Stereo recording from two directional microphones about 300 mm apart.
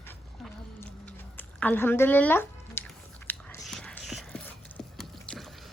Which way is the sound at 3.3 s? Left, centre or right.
Centre.